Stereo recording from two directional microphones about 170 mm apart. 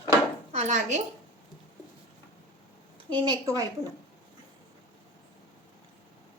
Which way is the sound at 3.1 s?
25° right (ahead or behind).